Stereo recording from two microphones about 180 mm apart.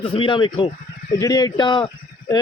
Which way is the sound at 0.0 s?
30° left (ahead or behind).